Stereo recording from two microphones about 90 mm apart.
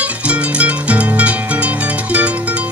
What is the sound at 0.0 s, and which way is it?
Music, 15° right (ahead or behind).